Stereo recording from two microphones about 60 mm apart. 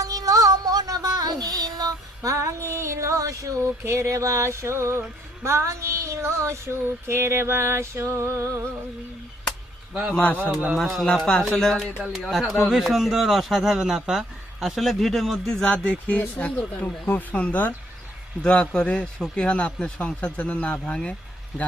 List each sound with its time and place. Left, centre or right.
0.0 s music: right
5.4 s female singing: right
9.9 s a man's voice: centre
10.8 s a man's voice: centre
11.9 s speech: centre
12.5 s speech: centre; by 17.7 s left
18.4 s a man's voice: centre